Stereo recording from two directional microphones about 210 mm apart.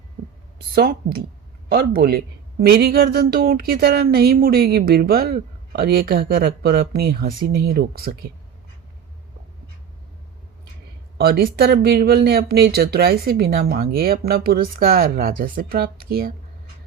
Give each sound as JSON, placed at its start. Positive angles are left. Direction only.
{"t": 0.8, "sound": "speech", "side_deg": -45}
{"t": 11.2, "sound": "speech", "side_deg": -45}